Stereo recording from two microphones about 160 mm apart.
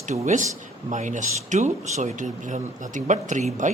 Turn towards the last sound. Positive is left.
turn(degrees=-50)  # may be behind; listen again after turning